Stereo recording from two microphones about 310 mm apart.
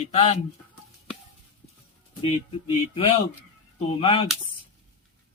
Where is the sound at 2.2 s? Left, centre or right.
Centre.